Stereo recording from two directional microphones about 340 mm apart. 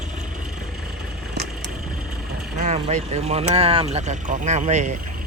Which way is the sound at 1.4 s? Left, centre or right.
Right.